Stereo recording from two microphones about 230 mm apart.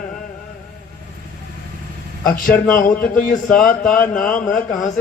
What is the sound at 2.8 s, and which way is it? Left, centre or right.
Speech, left.